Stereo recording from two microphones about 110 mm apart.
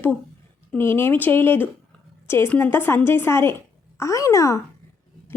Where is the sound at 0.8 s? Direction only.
20° left (ahead or behind).